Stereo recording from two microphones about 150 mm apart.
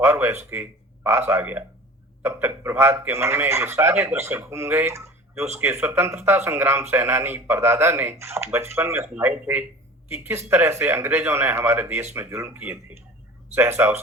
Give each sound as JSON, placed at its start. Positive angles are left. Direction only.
{"t": 0.0, "sound": "speech", "side_deg": -15}